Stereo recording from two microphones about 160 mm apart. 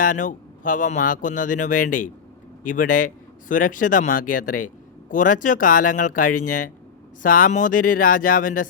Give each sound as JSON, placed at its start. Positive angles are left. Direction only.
{"t": 0.0, "sound": "speech", "side_deg": 55}